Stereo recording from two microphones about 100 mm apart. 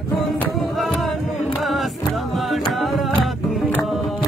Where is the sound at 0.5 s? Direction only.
Centre (ahead or behind).